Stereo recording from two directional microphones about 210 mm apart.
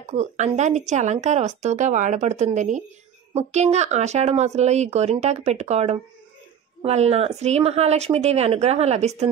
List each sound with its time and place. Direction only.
0.1 s speech: 35° right (ahead or behind)